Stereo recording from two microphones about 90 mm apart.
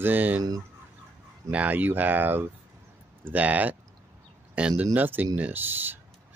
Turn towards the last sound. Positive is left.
turn(degrees=-20)  # may be behind; listen again after turning